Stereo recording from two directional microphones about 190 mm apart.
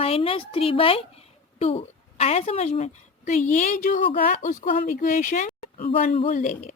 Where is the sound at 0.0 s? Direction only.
30° left (ahead or behind).